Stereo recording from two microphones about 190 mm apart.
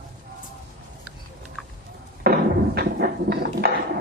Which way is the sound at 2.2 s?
55° right (ahead or behind).